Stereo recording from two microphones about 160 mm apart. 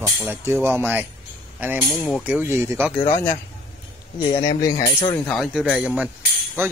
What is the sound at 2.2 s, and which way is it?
Speech, 10° right (ahead or behind).